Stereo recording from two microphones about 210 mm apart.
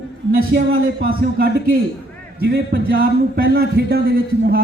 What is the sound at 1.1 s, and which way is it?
A man's voice, 45° right (ahead or behind).